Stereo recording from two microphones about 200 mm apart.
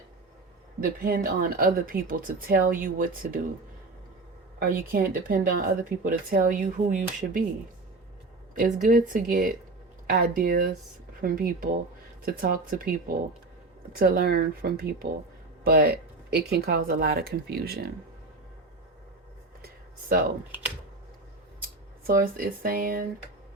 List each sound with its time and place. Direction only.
0.9 s speech: 50° right (ahead or behind)
4.6 s speech: 45° right (ahead or behind)
8.5 s speech: 45° right (ahead or behind)
13.9 s speech: 50° right (ahead or behind)
19.6 s a sound: 50° right (ahead or behind)
22.0 s speech: 45° right (ahead or behind)